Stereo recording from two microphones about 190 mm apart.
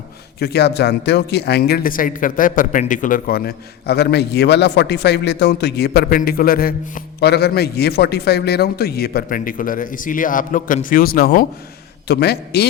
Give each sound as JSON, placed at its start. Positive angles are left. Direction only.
{"t": 0.3, "sound": "a man's voice", "side_deg": 60}